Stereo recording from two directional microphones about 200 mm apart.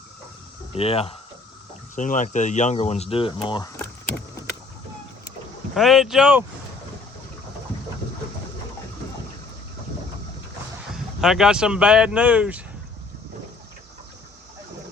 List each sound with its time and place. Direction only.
0.8 s speech: 30° left (ahead or behind)
5.7 s speech: centre (ahead or behind)
10.9 s speech: centre (ahead or behind)